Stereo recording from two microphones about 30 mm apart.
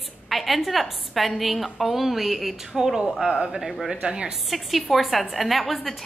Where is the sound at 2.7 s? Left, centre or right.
Centre.